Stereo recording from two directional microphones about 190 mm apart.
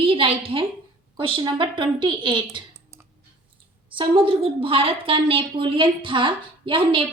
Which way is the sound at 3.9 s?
25° right (ahead or behind).